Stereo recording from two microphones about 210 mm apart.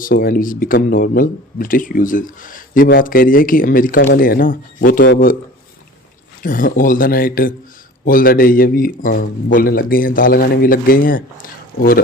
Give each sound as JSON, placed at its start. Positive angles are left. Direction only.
{"t": 0.0, "sound": "speech", "side_deg": 45}
{"t": 6.4, "sound": "a man's voice", "side_deg": 40}